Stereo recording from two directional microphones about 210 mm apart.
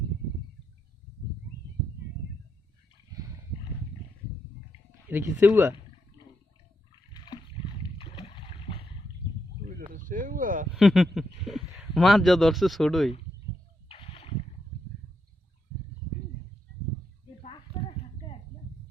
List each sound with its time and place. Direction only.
4.9 s speech: 10° right (ahead or behind)
7.9 s boat: 25° left (ahead or behind)
9.6 s a sound: 40° right (ahead or behind)
10.8 s a man's voice: centre (ahead or behind)
13.8 s rowboat: 25° left (ahead or behind)